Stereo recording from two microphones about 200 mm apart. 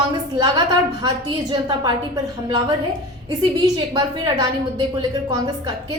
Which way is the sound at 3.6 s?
20° right (ahead or behind).